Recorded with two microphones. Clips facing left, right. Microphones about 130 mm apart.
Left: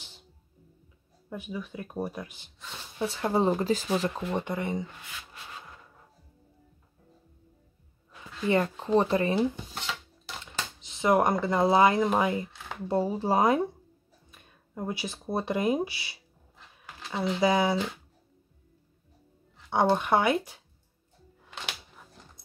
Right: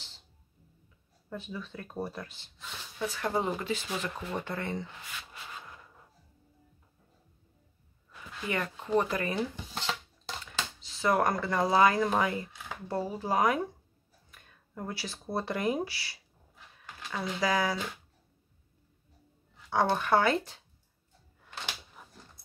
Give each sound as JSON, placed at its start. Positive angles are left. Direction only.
{"t": 1.3, "sound": "speech", "side_deg": 10}
{"t": 3.0, "sound": "speech", "side_deg": 25}
{"t": 4.3, "sound": "speech", "side_deg": 20}
{"t": 8.5, "sound": "speech", "side_deg": 30}
{"t": 19.7, "sound": "speech", "side_deg": 20}